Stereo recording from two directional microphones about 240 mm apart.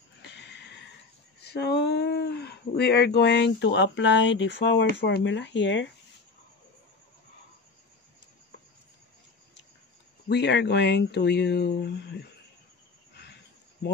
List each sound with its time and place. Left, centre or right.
0.2 s a sound: left
1.4 s speech: left
10.2 s speech: left
13.1 s cricket: left